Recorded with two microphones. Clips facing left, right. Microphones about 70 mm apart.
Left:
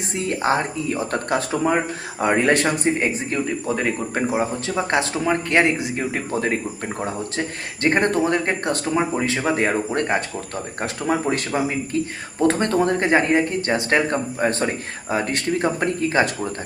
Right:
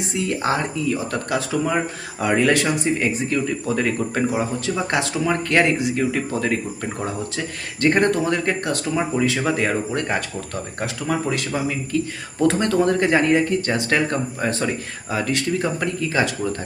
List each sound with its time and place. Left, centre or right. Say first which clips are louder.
0.0 s speech: even; left